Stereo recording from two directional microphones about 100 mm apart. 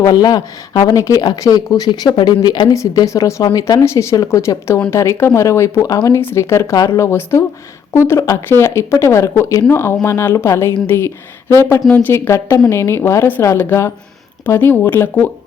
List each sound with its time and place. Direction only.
0.0 s speech: 40° left (ahead or behind); by 15.3 s 20° left (ahead or behind)